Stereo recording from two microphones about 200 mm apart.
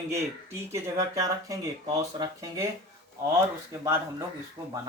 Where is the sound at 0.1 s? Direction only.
15° right (ahead or behind).